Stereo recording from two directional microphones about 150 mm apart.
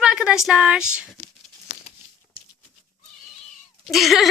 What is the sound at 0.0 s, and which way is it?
Speech, 5° right (ahead or behind).